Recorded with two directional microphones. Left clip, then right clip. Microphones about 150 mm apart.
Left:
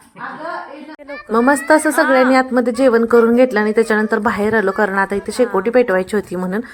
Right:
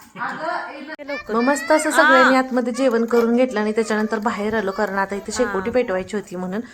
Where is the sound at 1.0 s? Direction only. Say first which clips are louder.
Right 3 dB; 35° right (ahead or behind).